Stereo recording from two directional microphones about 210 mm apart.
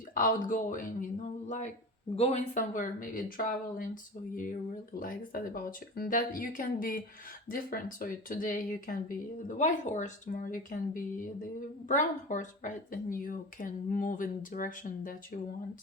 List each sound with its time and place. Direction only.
0.1 s speech: 40° left (ahead or behind)
4.9 s speech: 40° left (ahead or behind)